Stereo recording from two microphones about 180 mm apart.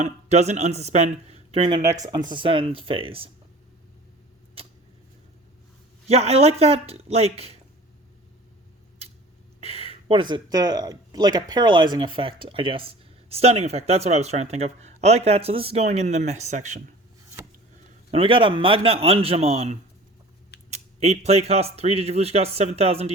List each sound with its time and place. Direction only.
0.0 s speech: 40° right (ahead or behind)
1.8 s speech: 15° right (ahead or behind)
4.6 s a sound: 30° right (ahead or behind)
6.1 s speech: 35° right (ahead or behind)
9.6 s speech: 35° right (ahead or behind)
18.1 s speech: 30° right (ahead or behind)